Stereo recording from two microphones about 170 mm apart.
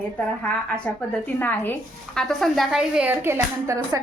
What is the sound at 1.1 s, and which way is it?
A woman's voice, 10° left (ahead or behind).